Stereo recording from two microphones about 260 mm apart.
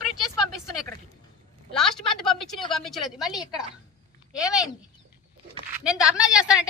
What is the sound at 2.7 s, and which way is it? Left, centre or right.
Speech, centre.